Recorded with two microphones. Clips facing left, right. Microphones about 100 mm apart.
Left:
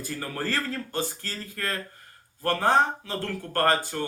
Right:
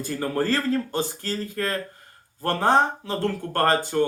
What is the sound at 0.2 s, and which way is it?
Speech, 25° right (ahead or behind).